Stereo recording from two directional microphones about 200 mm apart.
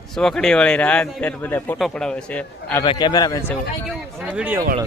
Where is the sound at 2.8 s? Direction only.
20° left (ahead or behind).